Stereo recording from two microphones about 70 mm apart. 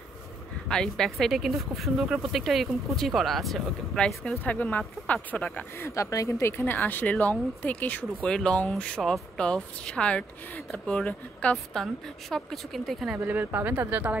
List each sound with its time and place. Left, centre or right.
0.7 s speech: centre
4.5 s speech: left
5.8 s speech: left
6.6 s speech: left
8.3 s a woman's voice: centre
11.5 s speech: centre
13.2 s speech: right